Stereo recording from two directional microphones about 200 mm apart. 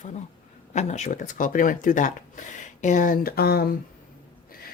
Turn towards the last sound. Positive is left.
turn(degrees=50)  # may be behind; listen again after turning